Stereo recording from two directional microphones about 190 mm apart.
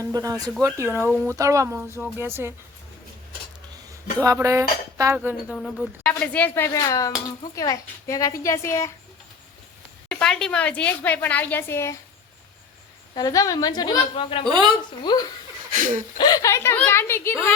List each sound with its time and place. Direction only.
0.0 s speech: 20° right (ahead or behind)
0.6 s dishes: 15° right (ahead or behind)
4.2 s dishes: 15° right (ahead or behind)
5.5 s a woman's voice: 5° left (ahead or behind)
10.1 s a woman's voice: 5° left (ahead or behind)
13.1 s a woman's voice: 20° left (ahead or behind)
14.5 s speech: 25° right (ahead or behind)
15.1 s a woman's voice: 20° left (ahead or behind)
15.7 s speech: 45° right (ahead or behind)
16.1 s a woman's voice: 20° left (ahead or behind)